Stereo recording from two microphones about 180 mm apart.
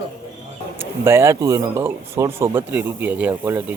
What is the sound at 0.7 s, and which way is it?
Speech, 10° right (ahead or behind).